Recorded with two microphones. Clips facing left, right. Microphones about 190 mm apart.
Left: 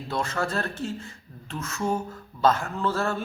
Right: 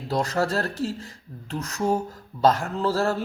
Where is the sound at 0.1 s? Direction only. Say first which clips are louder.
Right 4 dB; 35° right (ahead or behind).